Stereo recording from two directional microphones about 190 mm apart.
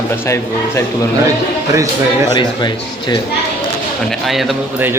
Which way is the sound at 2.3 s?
25° left (ahead or behind).